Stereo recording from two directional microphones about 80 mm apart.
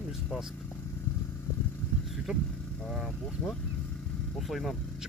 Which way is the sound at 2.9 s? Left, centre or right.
Centre.